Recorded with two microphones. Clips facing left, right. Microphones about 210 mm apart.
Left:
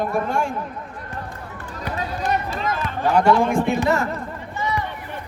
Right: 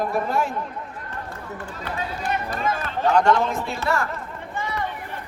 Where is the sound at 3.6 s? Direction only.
15° left (ahead or behind).